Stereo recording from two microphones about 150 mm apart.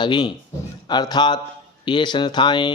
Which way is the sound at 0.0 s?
30° left (ahead or behind).